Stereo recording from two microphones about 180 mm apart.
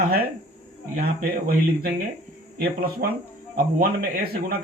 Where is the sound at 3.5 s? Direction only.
55° right (ahead or behind).